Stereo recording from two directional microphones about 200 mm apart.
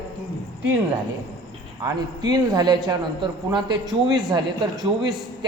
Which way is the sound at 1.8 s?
20° right (ahead or behind).